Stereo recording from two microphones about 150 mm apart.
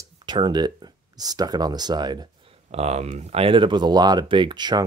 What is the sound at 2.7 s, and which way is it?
Speech, 45° right (ahead or behind).